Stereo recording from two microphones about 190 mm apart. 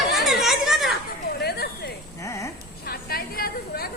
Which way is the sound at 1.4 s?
55° left (ahead or behind).